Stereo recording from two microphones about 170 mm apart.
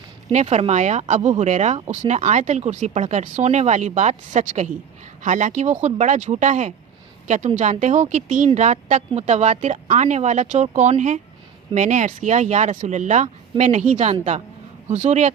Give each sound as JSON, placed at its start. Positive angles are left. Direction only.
{"t": 0.3, "sound": "speech", "side_deg": -40}